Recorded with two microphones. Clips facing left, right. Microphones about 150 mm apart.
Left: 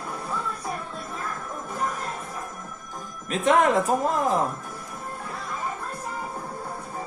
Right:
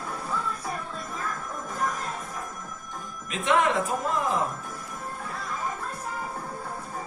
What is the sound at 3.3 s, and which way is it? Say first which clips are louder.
Speech: left 4 dB; 40° left (ahead or behind).